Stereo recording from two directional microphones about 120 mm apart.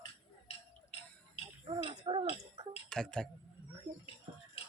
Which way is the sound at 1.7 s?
50° right (ahead or behind).